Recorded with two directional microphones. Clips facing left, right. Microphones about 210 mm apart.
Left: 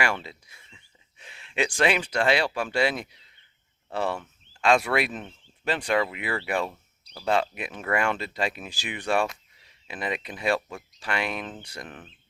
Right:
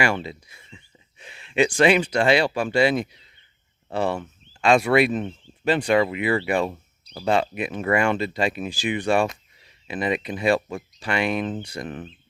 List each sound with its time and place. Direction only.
0.0 s speech: centre (ahead or behind)
6.7 s a sound: 20° right (ahead or behind)
7.3 s speech: centre (ahead or behind)